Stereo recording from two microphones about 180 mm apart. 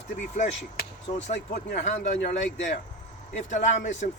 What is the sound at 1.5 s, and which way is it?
Speech, 55° left (ahead or behind).